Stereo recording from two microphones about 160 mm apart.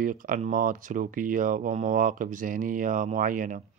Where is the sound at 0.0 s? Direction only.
60° right (ahead or behind).